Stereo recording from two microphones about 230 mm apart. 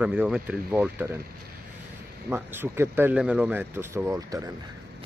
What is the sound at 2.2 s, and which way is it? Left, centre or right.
Speech, centre.